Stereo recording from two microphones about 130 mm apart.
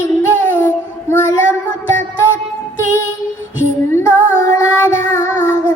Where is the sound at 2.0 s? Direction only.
20° left (ahead or behind).